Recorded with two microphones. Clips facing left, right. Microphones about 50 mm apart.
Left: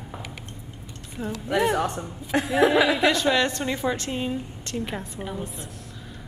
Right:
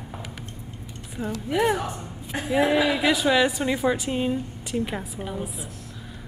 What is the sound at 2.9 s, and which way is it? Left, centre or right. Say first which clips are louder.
A woman's voice: even; centre.